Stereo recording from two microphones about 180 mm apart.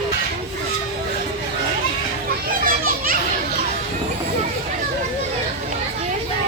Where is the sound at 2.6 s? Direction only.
50° right (ahead or behind).